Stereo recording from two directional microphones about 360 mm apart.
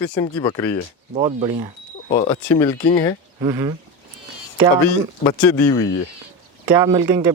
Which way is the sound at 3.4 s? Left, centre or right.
Centre.